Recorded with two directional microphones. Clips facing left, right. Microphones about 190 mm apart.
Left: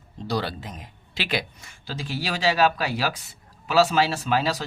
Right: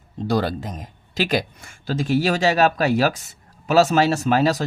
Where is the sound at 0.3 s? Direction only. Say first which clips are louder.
Right 6 dB; 45° right (ahead or behind).